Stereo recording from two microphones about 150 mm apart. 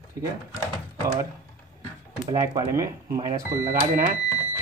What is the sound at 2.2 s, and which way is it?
Speech, 20° right (ahead or behind).